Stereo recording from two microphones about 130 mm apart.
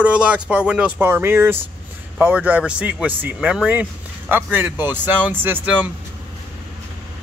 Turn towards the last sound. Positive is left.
turn(degrees=-10)  # may be behind; listen again after turning